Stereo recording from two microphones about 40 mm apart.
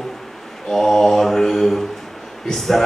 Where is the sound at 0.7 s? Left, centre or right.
Centre.